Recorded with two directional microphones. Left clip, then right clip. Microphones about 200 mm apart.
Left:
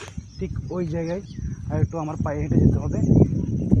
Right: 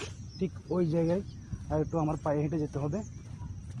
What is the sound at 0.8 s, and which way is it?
Speech, 30° left (ahead or behind).